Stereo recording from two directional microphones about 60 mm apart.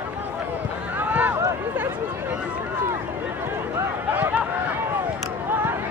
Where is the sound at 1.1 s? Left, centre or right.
Right.